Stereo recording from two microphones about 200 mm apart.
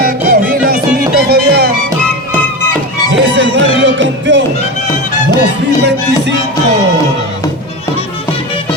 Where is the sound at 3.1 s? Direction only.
65° right (ahead or behind).